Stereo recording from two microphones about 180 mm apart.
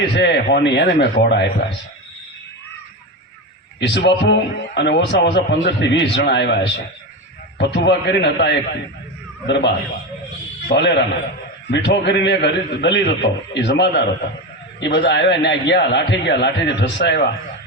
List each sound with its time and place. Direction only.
0.0 s a man's voice: 70° left (ahead or behind)
3.8 s a man's voice: 75° left (ahead or behind)